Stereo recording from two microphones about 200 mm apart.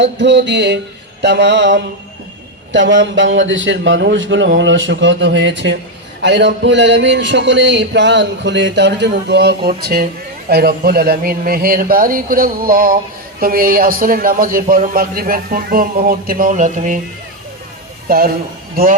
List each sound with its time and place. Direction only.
0.0 s a sound: 60° right (ahead or behind)
10.5 s a man's voice: 50° right (ahead or behind)
18.1 s a man's voice: 45° right (ahead or behind)